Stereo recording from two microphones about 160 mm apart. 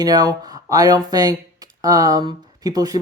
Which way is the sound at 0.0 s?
25° right (ahead or behind).